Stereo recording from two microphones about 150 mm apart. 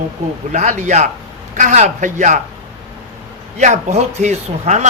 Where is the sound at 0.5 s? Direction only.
55° right (ahead or behind).